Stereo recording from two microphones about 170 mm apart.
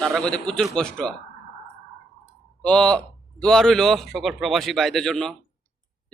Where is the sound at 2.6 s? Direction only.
5° left (ahead or behind).